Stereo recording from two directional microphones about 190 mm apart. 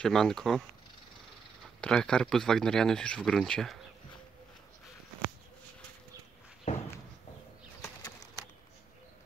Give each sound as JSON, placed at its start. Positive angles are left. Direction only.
{"t": 0.0, "sound": "speech", "side_deg": 5}
{"t": 1.8, "sound": "speech", "side_deg": 5}
{"t": 6.7, "sound": "a sound", "side_deg": 35}